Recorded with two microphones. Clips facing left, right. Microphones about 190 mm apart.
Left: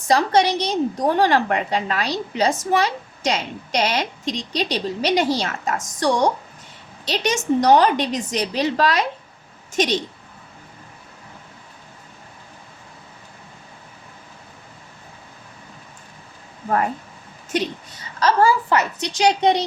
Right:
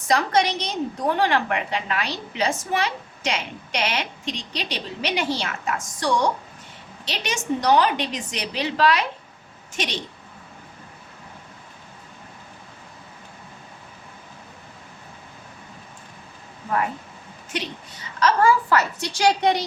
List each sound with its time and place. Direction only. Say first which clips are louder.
0.1 s a woman's voice: left 4 dB; 30° left (ahead or behind)
18.2 s a woman's voice: left 1 dB; 30° left (ahead or behind)